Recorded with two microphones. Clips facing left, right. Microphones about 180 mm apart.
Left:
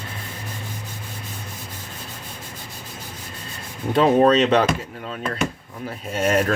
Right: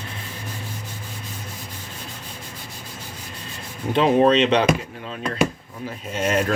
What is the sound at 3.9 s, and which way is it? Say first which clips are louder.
Speech: left 1 dB; 40° left (ahead or behind).